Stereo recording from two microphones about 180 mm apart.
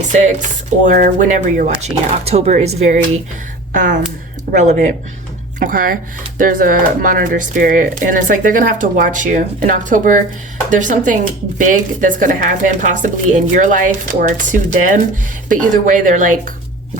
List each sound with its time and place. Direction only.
0.9 s speech: 45° right (ahead or behind)